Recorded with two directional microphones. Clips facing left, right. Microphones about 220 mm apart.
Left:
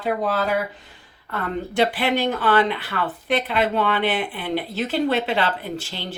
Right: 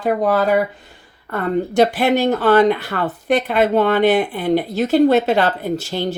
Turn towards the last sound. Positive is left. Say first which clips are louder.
# right 9 dB
turn(degrees=-45)  # may be behind; listen again after turning